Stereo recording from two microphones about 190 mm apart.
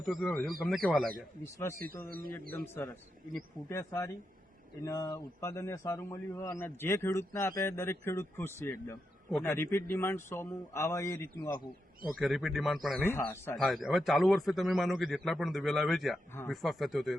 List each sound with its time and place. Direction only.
0.0 s a man's voice: centre (ahead or behind)
2.0 s speech: 50° right (ahead or behind)
2.5 s a man's voice: 10° left (ahead or behind)
12.2 s a man's voice: centre (ahead or behind)
13.1 s a man's voice: 10° left (ahead or behind)
13.6 s a man's voice: centre (ahead or behind)